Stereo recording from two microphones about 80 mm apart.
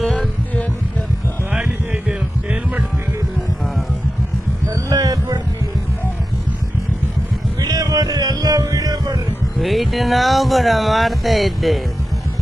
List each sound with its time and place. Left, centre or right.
0.0 s music: centre
1.5 s music: centre
4.7 s a sound: right
7.6 s music: right
9.6 s speech: centre